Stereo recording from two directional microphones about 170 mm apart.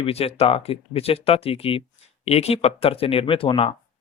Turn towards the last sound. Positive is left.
turn(degrees=30)  # may be behind; listen again after turning